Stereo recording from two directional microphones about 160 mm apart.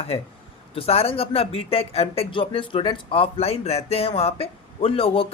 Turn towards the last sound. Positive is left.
turn(degrees=35)  # may be behind; listen again after turning